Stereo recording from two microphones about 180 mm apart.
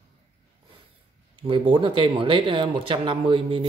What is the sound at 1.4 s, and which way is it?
Speech, 30° right (ahead or behind).